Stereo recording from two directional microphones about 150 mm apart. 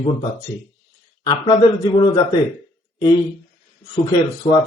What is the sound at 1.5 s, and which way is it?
Speech, 30° left (ahead or behind).